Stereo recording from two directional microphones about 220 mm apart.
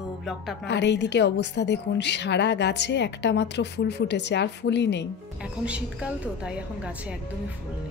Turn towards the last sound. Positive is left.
turn(degrees=-5)  # may be behind; listen again after turning